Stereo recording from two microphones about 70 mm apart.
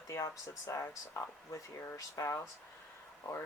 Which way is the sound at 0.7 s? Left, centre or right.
Left.